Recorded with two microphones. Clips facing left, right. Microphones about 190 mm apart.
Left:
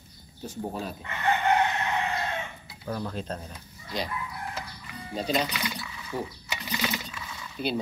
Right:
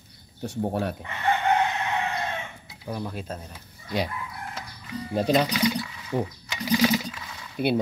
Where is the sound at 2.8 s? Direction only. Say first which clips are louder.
Even; 10° right (ahead or behind).